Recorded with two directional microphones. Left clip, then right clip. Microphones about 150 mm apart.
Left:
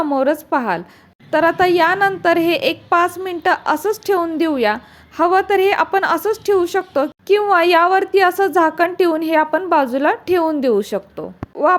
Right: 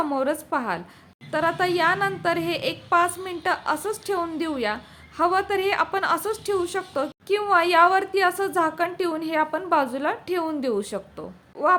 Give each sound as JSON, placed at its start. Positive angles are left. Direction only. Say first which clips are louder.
{"t": 0.0, "sound": "a woman's voice", "louder": "left 7 dB", "side_deg": 35}